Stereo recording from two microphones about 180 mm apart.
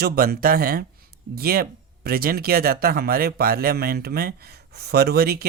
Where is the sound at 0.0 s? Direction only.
55° right (ahead or behind).